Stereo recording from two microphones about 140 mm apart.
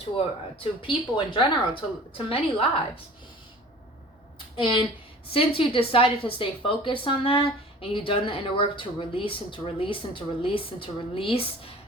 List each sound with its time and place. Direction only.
0.8 s speech: 35° left (ahead or behind)
4.5 s speech: 35° left (ahead or behind)